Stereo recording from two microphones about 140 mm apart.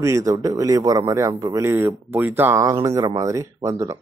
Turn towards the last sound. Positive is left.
turn(degrees=-20)  # may be behind; listen again after turning